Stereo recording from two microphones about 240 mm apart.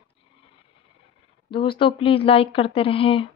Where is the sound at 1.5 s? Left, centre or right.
Left.